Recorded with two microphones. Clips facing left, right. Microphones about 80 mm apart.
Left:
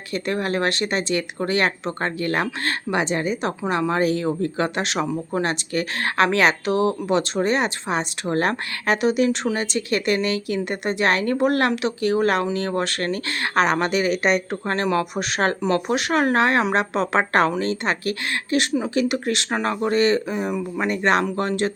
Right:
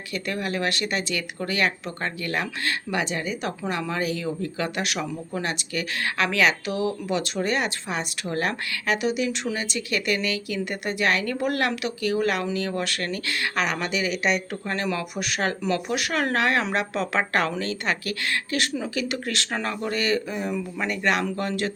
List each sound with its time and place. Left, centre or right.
0.1 s a woman's voice: left